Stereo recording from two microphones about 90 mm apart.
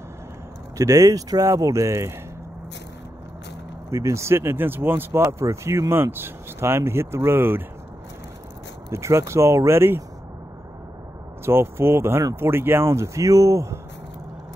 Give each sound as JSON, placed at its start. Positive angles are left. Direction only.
{"t": 0.7, "sound": "speech", "side_deg": -40}
{"t": 3.9, "sound": "speech", "side_deg": -30}
{"t": 8.9, "sound": "speech", "side_deg": -30}
{"t": 11.4, "sound": "speech", "side_deg": -30}